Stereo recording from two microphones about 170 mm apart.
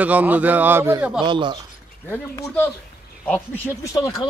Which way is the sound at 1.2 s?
30° right (ahead or behind).